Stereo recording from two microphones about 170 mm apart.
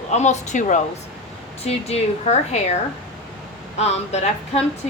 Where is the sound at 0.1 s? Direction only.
45° left (ahead or behind).